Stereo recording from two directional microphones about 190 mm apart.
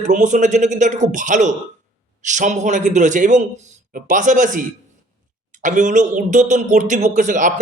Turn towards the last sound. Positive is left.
turn(degrees=-40)  # may be behind; listen again after turning